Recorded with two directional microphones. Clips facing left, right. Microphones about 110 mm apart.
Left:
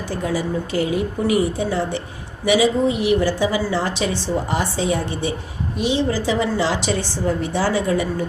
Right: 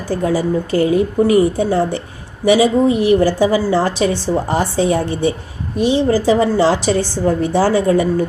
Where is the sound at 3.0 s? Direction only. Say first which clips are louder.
Right 5 dB; 45° right (ahead or behind).